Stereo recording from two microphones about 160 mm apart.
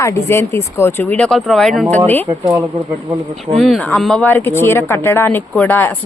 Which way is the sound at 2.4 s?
20° right (ahead or behind).